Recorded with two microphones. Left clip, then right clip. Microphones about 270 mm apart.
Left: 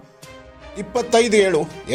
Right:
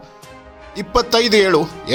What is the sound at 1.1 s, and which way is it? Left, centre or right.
Speech, centre.